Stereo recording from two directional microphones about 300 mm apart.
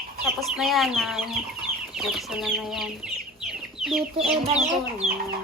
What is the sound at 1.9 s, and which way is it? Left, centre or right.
Chicken, centre.